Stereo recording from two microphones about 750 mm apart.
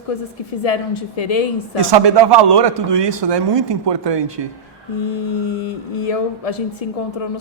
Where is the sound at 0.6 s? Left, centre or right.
Left.